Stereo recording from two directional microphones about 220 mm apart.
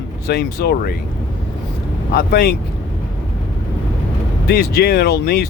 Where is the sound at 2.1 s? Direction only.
45° left (ahead or behind).